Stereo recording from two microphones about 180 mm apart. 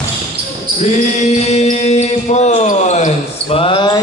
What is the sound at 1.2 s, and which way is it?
Mantra, 40° left (ahead or behind).